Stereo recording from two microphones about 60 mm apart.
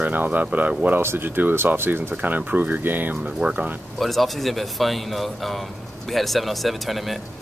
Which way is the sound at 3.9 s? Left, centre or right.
Centre.